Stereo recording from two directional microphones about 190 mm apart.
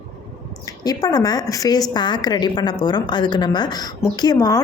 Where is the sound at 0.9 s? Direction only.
20° left (ahead or behind).